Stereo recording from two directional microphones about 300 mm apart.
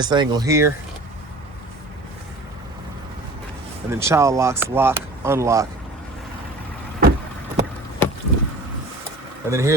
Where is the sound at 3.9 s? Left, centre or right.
Centre.